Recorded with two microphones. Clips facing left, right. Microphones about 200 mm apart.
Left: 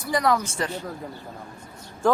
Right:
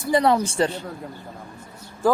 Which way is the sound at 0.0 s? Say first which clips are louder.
Right 4 dB; 25° right (ahead or behind).